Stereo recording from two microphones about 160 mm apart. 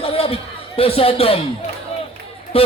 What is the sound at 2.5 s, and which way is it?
Speech, 35° left (ahead or behind).